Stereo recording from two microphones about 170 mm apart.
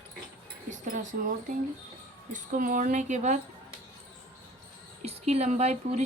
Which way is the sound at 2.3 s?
50° right (ahead or behind).